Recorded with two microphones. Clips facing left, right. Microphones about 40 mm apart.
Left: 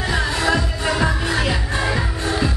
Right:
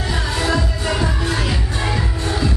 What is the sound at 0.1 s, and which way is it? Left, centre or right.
Music, left.